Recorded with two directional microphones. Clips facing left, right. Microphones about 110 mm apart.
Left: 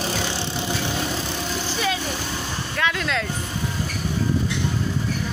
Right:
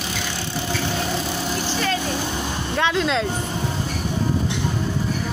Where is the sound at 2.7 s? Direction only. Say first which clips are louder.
Right 4 dB; 25° right (ahead or behind).